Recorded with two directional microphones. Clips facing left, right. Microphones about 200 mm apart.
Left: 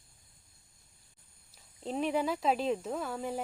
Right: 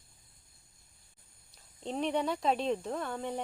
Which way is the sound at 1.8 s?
5° left (ahead or behind).